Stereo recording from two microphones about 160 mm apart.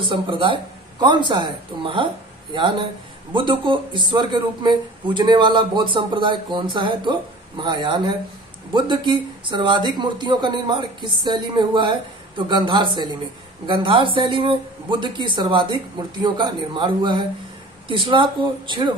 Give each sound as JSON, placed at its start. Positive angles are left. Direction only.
{"t": 0.0, "sound": "a man's voice", "side_deg": -30}